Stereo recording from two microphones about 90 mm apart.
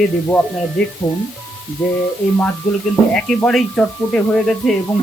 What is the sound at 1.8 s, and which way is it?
Speech, 20° left (ahead or behind).